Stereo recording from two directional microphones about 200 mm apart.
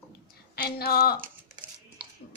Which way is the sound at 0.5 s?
50° left (ahead or behind).